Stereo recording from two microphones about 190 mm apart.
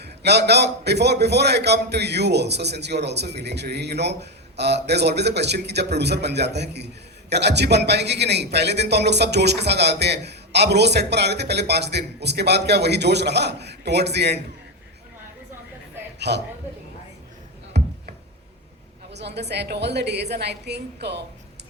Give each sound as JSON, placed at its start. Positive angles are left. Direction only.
{"t": 0.0, "sound": "a man's voice", "side_deg": -60}
{"t": 16.1, "sound": "a man's voice", "side_deg": -60}
{"t": 17.7, "sound": "tick-tock", "side_deg": -60}
{"t": 19.1, "sound": "a man's voice", "side_deg": -60}